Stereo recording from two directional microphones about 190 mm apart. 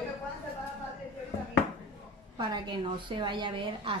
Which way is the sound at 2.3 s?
25° right (ahead or behind).